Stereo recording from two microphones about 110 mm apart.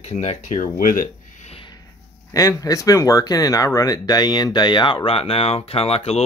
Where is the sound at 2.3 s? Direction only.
30° left (ahead or behind).